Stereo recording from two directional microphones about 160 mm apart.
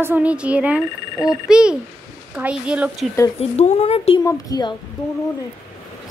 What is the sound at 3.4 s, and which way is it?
Speech, 45° left (ahead or behind).